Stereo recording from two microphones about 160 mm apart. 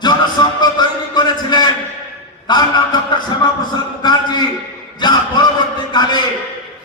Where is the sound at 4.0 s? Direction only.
25° left (ahead or behind).